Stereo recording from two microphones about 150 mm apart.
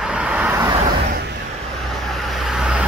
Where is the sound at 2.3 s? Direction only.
5° right (ahead or behind).